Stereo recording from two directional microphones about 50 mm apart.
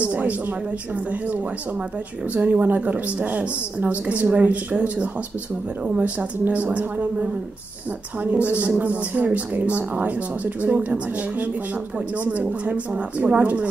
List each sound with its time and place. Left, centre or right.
0.0 s speech: right
2.3 s speech: right
2.6 s speech: right